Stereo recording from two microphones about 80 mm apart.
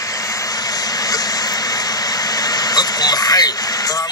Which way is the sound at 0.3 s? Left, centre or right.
Left.